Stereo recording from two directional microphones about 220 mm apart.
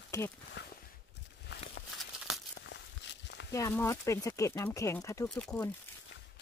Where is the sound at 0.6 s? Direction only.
50° left (ahead or behind).